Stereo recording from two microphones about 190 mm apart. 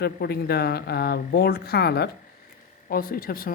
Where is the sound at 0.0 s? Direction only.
55° left (ahead or behind).